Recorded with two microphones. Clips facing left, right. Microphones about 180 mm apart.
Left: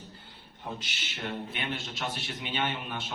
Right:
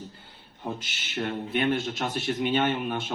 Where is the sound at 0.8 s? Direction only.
50° right (ahead or behind).